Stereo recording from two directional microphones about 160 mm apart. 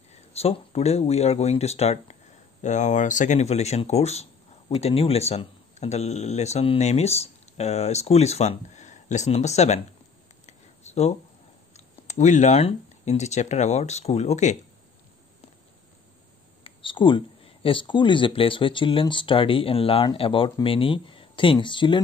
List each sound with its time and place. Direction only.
0.1 s speech: 40° left (ahead or behind)
10.4 s a sound: 45° left (ahead or behind)
11.7 s speech: 45° left (ahead or behind)
16.6 s speech: 30° left (ahead or behind)